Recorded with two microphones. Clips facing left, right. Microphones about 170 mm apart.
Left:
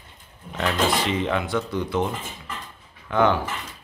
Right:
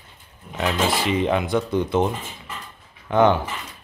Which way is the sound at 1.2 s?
20° right (ahead or behind).